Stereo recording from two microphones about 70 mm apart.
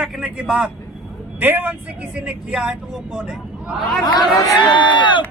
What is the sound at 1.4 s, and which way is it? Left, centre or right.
Speech, right.